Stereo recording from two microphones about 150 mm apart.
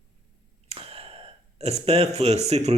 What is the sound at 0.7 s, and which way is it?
Gasp, 40° right (ahead or behind).